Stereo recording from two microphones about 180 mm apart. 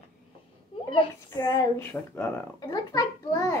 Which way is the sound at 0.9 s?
20° left (ahead or behind).